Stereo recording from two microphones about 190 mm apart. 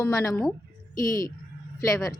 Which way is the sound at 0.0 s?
15° left (ahead or behind).